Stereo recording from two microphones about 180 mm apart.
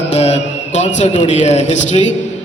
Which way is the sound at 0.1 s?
35° left (ahead or behind).